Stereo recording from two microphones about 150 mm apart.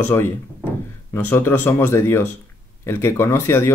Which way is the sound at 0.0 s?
15° left (ahead or behind).